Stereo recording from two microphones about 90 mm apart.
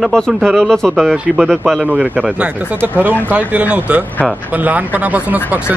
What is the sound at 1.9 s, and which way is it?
Speech, 15° right (ahead or behind).